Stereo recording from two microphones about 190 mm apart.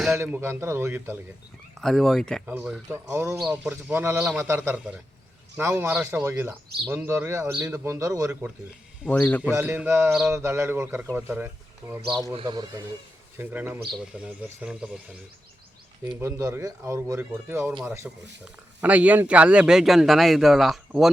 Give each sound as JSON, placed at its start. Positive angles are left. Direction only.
{"t": 0.2, "sound": "a man's voice", "side_deg": -10}
{"t": 1.8, "sound": "a man's voice", "side_deg": 0}
{"t": 3.3, "sound": "a man's voice", "side_deg": 0}
{"t": 9.0, "sound": "a man's voice", "side_deg": 5}
{"t": 9.4, "sound": "a man's voice", "side_deg": -10}
{"t": 10.3, "sound": "a man's voice", "side_deg": -15}
{"t": 12.3, "sound": "speech", "side_deg": -25}
{"t": 13.4, "sound": "a man's voice", "side_deg": -10}
{"t": 16.1, "sound": "a man's voice", "side_deg": -15}